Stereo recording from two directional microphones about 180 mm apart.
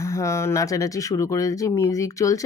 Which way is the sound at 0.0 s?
15° left (ahead or behind).